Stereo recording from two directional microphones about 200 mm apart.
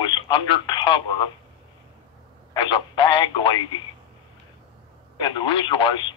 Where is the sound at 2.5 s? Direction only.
25° left (ahead or behind).